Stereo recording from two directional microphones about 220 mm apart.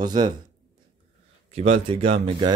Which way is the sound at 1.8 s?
25° right (ahead or behind).